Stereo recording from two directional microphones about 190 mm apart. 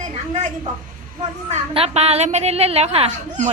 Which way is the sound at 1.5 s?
35° right (ahead or behind).